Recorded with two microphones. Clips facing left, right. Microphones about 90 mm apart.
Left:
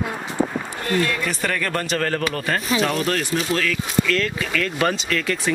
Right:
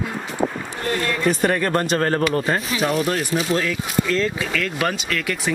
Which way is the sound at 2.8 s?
10° right (ahead or behind).